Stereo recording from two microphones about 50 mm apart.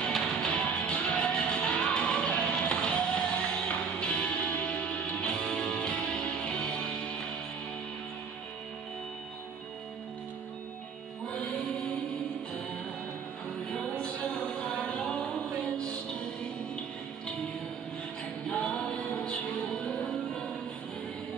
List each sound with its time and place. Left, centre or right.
0.1 s music: centre
0.5 s music: left
13.7 s music: centre
18.6 s music: left